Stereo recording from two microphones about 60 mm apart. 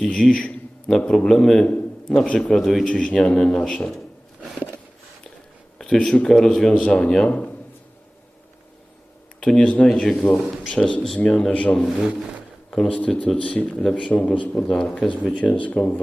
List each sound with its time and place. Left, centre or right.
0.0 s a man's voice: centre
2.2 s speech: centre
2.5 s a man's voice: centre
2.9 s a man's voice: centre
5.8 s a man's voice: centre
6.8 s speech: left
9.4 s a man's voice: centre
10.8 s a man's voice: centre
12.0 s a sound: centre
12.9 s a man's voice: centre